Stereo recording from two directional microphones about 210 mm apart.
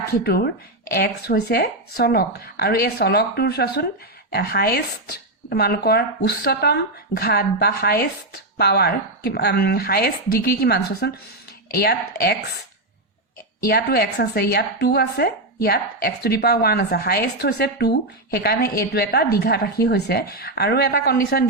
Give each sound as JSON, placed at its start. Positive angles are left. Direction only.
{"t": 0.1, "sound": "a woman's voice", "side_deg": 50}
{"t": 13.6, "sound": "a woman's voice", "side_deg": 45}